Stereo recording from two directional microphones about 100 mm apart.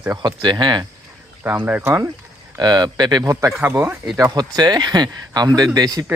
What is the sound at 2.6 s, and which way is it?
Speech, 45° right (ahead or behind).